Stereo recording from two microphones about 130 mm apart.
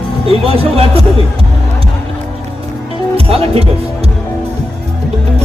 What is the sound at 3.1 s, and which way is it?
Music, 50° right (ahead or behind).